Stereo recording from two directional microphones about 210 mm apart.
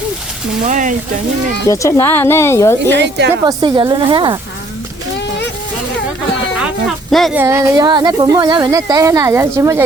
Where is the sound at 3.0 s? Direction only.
55° right (ahead or behind).